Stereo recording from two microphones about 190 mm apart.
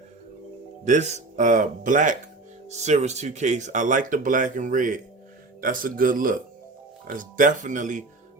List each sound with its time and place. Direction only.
0.9 s speech: 40° right (ahead or behind)